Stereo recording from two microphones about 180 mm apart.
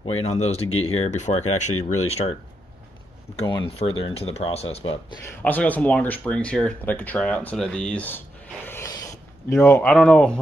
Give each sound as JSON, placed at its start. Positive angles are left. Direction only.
{"t": 0.0, "sound": "speech", "side_deg": 35}
{"t": 3.3, "sound": "speech", "side_deg": 30}
{"t": 5.4, "sound": "speech", "side_deg": 10}
{"t": 8.6, "sound": "a sound", "side_deg": 15}